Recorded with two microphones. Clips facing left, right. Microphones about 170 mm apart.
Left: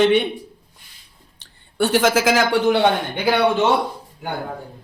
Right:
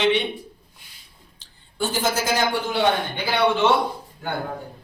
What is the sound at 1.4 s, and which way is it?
Speech, 70° left (ahead or behind).